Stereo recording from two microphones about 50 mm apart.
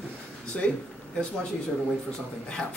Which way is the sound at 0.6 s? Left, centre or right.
Centre.